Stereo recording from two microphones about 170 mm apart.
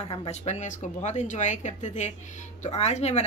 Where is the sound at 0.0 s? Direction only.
35° left (ahead or behind).